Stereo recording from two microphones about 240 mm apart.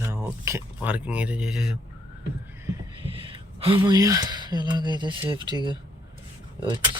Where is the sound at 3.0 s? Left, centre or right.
Right.